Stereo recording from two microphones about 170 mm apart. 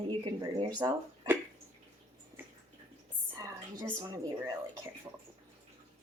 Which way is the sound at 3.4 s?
20° right (ahead or behind).